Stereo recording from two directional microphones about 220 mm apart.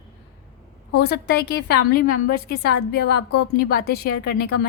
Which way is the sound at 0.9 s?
50° left (ahead or behind).